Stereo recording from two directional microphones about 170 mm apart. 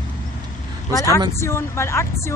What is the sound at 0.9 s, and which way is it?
A woman's voice, 20° left (ahead or behind).